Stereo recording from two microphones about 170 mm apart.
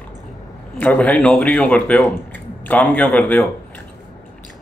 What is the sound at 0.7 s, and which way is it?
Speech, 10° left (ahead or behind).